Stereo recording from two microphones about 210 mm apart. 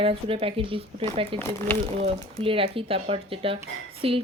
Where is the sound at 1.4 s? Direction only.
10° left (ahead or behind).